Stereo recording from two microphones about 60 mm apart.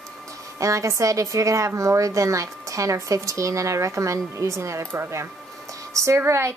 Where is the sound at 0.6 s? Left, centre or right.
Right.